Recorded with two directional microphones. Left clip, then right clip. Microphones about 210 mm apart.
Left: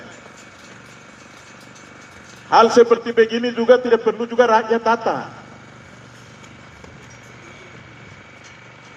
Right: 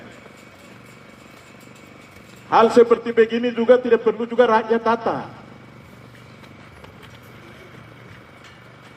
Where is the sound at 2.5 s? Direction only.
50° right (ahead or behind).